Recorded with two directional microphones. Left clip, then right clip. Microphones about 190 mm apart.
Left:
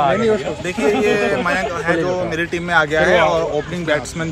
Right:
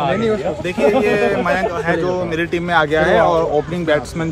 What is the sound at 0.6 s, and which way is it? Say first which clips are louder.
Speech: right 2 dB; 5° right (ahead or behind).